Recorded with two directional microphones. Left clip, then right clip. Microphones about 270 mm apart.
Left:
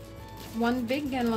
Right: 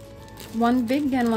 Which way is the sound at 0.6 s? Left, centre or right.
Centre.